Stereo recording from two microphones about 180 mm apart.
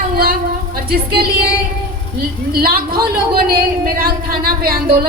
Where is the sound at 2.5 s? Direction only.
55° right (ahead or behind).